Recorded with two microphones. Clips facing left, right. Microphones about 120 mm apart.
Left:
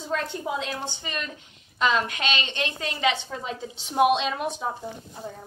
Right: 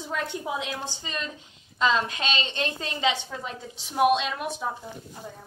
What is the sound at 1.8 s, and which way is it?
A woman's voice, 30° right (ahead or behind).